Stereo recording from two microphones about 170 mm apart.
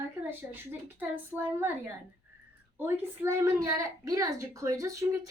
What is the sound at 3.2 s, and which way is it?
A woman's voice, 15° right (ahead or behind).